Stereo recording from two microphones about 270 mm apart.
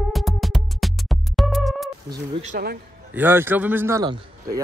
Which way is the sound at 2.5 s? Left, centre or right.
Right.